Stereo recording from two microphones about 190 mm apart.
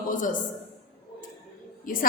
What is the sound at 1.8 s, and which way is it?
Speech, 45° left (ahead or behind).